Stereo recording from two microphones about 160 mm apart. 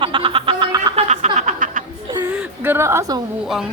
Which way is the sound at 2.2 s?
10° right (ahead or behind).